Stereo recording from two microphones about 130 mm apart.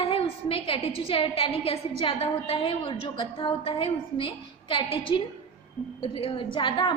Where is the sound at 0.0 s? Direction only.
45° left (ahead or behind).